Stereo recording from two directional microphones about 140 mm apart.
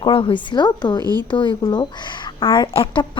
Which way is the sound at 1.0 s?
30° right (ahead or behind).